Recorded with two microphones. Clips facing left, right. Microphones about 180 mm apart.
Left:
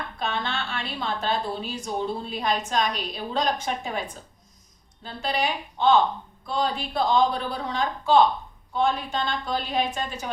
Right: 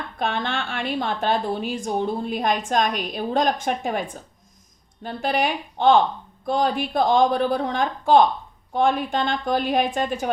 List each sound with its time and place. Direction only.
0.2 s a woman's voice: 55° right (ahead or behind)